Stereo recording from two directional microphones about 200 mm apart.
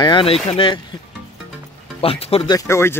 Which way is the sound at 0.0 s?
25° left (ahead or behind).